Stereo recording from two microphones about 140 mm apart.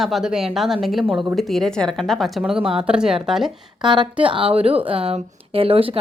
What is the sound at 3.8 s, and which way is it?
Speech, 35° right (ahead or behind).